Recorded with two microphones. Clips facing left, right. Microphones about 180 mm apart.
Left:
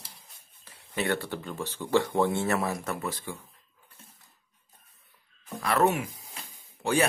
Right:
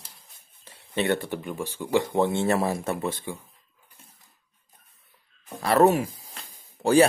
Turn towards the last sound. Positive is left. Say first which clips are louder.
# right 8 dB
turn(degrees=-35)  # may be behind; listen again after turning